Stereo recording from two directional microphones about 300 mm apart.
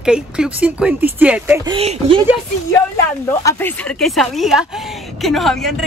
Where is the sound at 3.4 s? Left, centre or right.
Centre.